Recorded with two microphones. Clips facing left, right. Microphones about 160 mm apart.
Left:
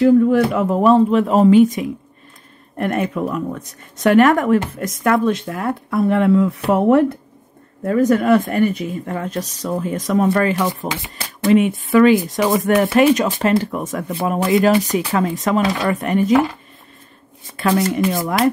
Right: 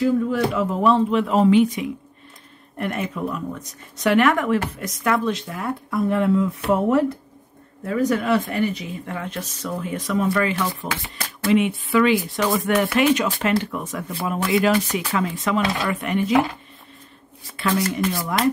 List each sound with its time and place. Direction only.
0.0 s speech: 55° left (ahead or behind)
7.8 s speech: 50° left (ahead or behind)
14.7 s speech: 15° left (ahead or behind)
15.1 s speech: 45° left (ahead or behind)
17.6 s speech: 45° left (ahead or behind)